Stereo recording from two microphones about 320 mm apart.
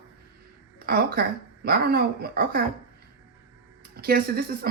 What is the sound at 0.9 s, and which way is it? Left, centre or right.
Speech, right.